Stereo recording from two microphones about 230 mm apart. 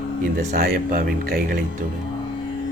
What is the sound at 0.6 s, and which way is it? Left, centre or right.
Speech, right.